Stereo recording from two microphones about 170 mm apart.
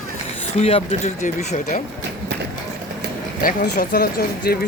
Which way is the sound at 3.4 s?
55° left (ahead or behind).